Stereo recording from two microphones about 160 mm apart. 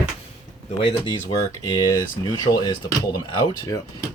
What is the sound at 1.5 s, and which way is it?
Speech, 20° left (ahead or behind).